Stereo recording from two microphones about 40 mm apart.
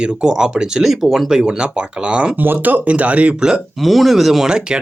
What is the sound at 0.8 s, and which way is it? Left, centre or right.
Speech, centre.